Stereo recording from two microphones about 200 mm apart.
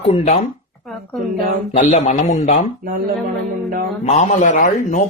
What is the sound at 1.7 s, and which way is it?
Speech, 35° left (ahead or behind).